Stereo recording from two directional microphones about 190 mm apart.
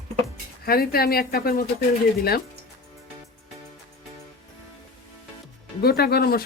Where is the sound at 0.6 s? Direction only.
55° left (ahead or behind).